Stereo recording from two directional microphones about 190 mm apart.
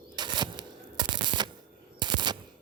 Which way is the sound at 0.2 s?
25° right (ahead or behind).